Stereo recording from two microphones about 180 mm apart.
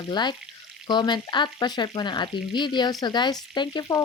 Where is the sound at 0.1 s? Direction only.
25° left (ahead or behind).